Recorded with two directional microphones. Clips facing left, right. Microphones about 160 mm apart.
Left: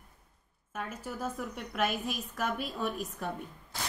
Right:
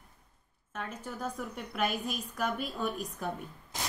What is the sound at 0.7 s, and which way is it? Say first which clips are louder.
A woman's voice: left 1 dB; 5° left (ahead or behind).